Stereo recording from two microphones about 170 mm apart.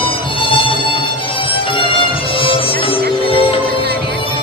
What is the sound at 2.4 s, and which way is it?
Music, 30° left (ahead or behind).